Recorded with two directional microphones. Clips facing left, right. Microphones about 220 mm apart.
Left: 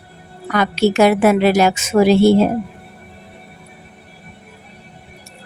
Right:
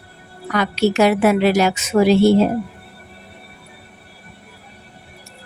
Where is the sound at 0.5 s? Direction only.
50° left (ahead or behind).